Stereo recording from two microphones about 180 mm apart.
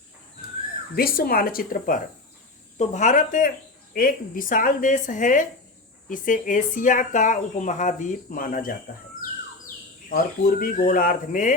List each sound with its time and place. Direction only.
0.9 s speech: 55° left (ahead or behind)
2.7 s speech: 40° left (ahead or behind)
10.1 s speech: 55° left (ahead or behind)